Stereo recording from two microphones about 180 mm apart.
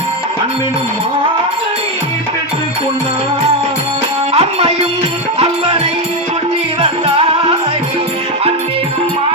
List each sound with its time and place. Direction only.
4.4 s music: 35° right (ahead or behind)
6.8 s music: 30° right (ahead or behind)